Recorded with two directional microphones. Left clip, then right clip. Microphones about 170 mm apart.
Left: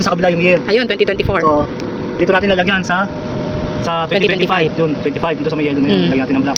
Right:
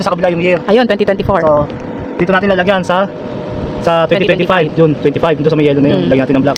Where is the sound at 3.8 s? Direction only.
65° right (ahead or behind).